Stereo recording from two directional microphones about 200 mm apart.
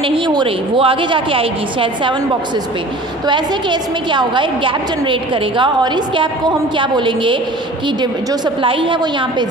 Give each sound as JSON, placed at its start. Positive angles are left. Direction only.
{"t": 0.0, "sound": "a woman's voice", "side_deg": -25}
{"t": 3.3, "sound": "a woman's voice", "side_deg": -25}